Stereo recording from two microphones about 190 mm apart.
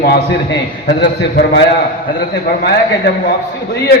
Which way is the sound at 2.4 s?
55° left (ahead or behind).